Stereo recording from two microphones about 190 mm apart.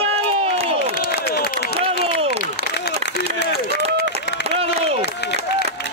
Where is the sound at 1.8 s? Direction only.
30° right (ahead or behind).